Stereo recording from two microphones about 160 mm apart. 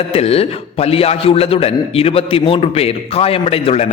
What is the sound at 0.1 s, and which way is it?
A man's voice, 40° left (ahead or behind).